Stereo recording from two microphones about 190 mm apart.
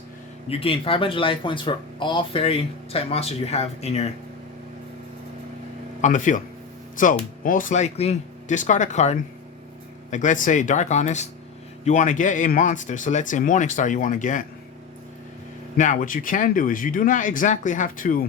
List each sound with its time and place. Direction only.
0.4 s speech: 30° left (ahead or behind)
6.0 s speech: 40° left (ahead or behind)
15.8 s speech: 45° left (ahead or behind)